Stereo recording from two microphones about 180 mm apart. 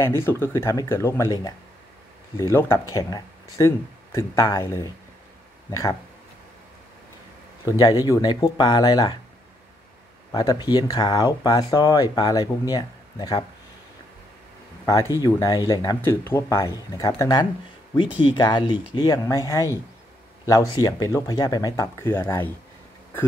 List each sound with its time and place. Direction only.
0.0 s speech: 15° left (ahead or behind)
7.6 s speech: 20° left (ahead or behind)
10.3 s speech: 20° left (ahead or behind)
14.9 s speech: 20° left (ahead or behind)